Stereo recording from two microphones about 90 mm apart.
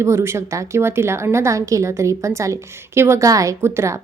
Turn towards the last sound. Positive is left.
turn(degrees=-30)  # may be behind; listen again after turning